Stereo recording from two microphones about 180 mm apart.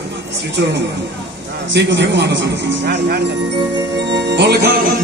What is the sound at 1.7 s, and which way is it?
A man's voice, 75° right (ahead or behind).